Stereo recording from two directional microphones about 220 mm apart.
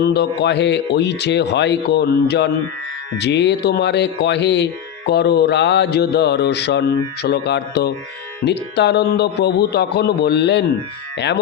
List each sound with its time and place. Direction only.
0.0 s speech: 50° left (ahead or behind)